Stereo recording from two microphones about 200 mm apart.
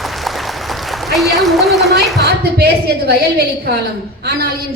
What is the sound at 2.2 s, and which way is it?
A woman's voice, 55° right (ahead or behind).